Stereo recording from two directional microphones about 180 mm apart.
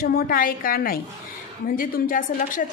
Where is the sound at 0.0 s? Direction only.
55° left (ahead or behind).